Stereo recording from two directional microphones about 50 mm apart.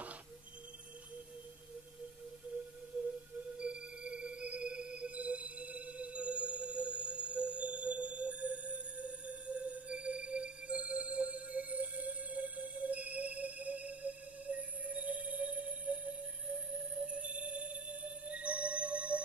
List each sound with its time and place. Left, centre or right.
3.5 s music: right